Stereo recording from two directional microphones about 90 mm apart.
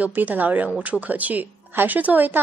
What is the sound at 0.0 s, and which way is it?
A woman's voice, 20° right (ahead or behind).